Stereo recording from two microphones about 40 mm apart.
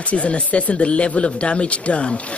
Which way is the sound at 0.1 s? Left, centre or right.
Left.